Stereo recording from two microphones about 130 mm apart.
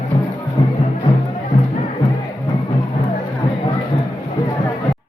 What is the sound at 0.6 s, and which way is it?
Music, 35° left (ahead or behind).